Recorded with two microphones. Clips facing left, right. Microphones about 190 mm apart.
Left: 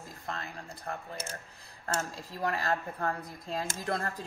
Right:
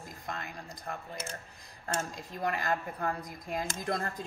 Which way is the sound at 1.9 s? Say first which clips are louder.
Left 1 dB; 20° right (ahead or behind).